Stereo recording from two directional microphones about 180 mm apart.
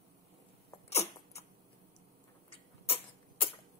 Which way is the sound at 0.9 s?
35° left (ahead or behind).